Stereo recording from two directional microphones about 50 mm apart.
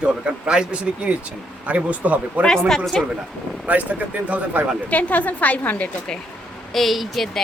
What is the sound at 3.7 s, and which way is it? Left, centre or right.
Speech, right.